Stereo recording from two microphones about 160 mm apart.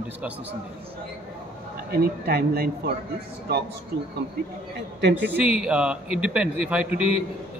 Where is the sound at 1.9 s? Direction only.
75° right (ahead or behind).